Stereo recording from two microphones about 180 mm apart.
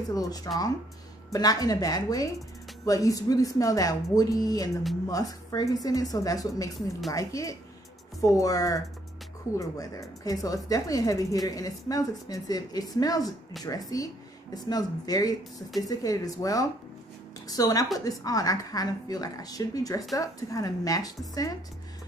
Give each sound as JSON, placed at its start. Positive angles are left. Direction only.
{"t": 0.1, "sound": "a woman's voice", "side_deg": 20}
{"t": 13.2, "sound": "speech", "side_deg": 0}
{"t": 13.7, "sound": "speech", "side_deg": 20}